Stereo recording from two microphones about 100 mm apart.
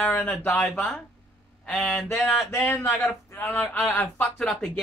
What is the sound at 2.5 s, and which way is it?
Speech, 25° left (ahead or behind).